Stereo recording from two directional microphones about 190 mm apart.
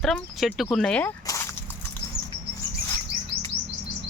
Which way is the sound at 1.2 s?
15° left (ahead or behind).